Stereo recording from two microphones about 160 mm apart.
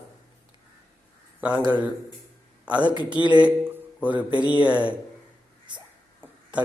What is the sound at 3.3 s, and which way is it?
Speech, 10° right (ahead or behind).